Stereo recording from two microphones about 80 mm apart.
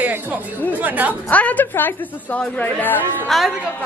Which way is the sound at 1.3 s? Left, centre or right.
Centre.